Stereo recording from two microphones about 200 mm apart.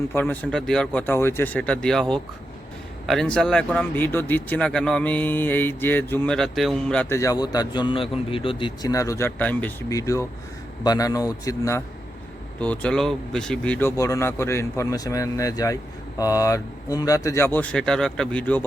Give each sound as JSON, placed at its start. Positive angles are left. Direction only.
{"t": 0.1, "sound": "speech", "side_deg": 10}